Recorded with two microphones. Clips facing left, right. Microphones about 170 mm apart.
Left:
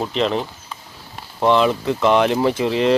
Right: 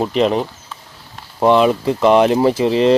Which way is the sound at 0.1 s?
10° right (ahead or behind).